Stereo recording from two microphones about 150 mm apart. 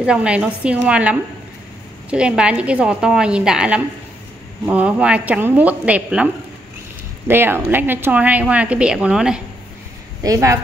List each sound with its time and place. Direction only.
0.0 s a woman's voice: 5° right (ahead or behind)
10.2 s speech: 20° right (ahead or behind)